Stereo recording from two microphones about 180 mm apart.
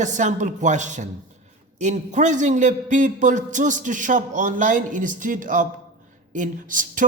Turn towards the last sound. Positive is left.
turn(degrees=-50)  # may be behind; listen again after turning